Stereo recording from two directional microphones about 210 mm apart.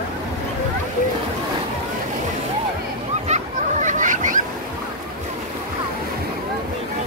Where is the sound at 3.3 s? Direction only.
35° right (ahead or behind).